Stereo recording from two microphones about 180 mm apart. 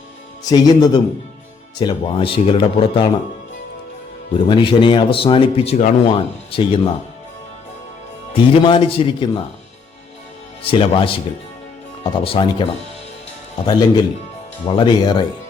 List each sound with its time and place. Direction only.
0.5 s speech: 20° left (ahead or behind)
4.4 s speech: 25° left (ahead or behind)
8.3 s speech: 30° left (ahead or behind)
10.6 s speech: 30° left (ahead or behind)
13.7 s speech: 25° left (ahead or behind)